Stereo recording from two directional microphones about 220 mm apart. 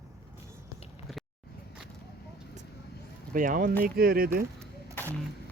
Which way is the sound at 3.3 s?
40° right (ahead or behind).